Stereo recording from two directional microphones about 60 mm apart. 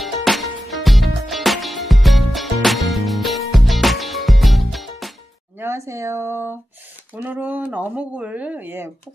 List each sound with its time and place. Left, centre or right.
0.0 s music: centre
5.6 s a sound: right
7.2 s speech: right
8.6 s speech: right